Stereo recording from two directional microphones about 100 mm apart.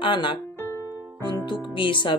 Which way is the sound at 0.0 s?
55° left (ahead or behind).